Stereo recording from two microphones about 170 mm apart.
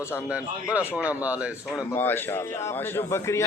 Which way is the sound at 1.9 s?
10° left (ahead or behind).